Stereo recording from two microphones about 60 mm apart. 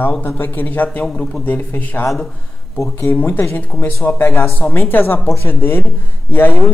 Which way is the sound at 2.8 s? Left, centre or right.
Left.